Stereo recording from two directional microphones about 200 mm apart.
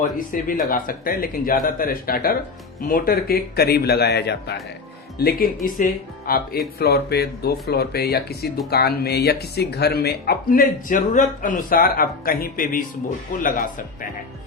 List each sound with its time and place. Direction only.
0.3 s speech: 45° left (ahead or behind)